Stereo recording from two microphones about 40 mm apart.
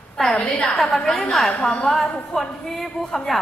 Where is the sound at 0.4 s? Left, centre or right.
Left.